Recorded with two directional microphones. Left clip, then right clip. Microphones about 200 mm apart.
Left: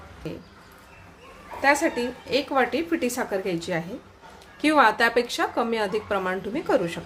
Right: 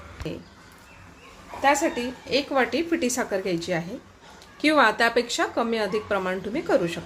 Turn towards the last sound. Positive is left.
turn(degrees=0)  # may be behind; listen again after turning